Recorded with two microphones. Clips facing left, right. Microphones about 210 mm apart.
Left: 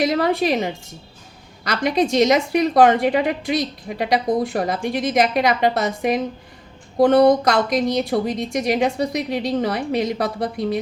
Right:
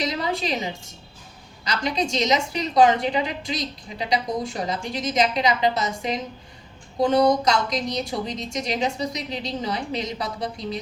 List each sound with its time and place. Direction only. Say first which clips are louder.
0.0 s a woman's voice: left 8 dB; 60° left (ahead or behind)